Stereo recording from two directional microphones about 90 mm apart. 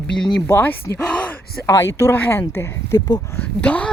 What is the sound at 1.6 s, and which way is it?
Speech, 30° left (ahead or behind).